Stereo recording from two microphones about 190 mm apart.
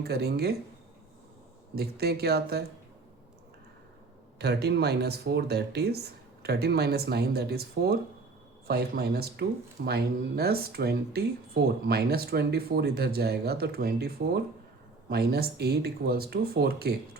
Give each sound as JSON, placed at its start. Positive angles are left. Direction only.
{"t": 0.0, "sound": "speech", "side_deg": -55}
{"t": 1.7, "sound": "speech", "side_deg": -55}
{"t": 4.4, "sound": "speech", "side_deg": -60}
{"t": 15.1, "sound": "speech", "side_deg": -55}